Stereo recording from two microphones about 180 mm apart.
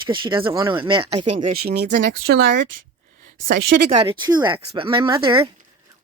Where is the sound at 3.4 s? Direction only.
75° right (ahead or behind).